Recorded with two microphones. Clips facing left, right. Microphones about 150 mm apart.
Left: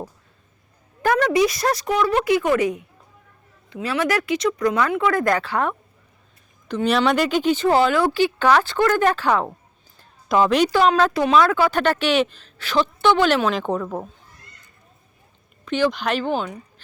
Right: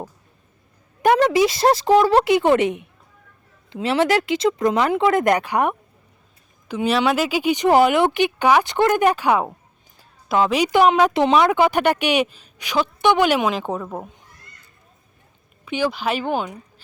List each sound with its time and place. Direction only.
1.0 s a woman's voice: 25° right (ahead or behind)
10.0 s a sound: 5° right (ahead or behind)
10.7 s a woman's voice: 15° right (ahead or behind)
15.6 s speech: 10° right (ahead or behind)